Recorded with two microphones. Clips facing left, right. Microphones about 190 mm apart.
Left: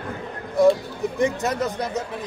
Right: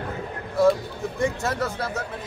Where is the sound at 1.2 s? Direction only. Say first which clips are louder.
Left 2 dB; 20° left (ahead or behind).